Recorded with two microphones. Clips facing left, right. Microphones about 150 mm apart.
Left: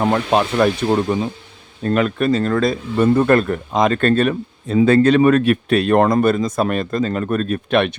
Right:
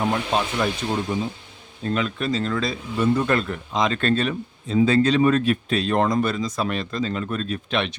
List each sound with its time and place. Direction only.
0.0 s speech: 60° left (ahead or behind)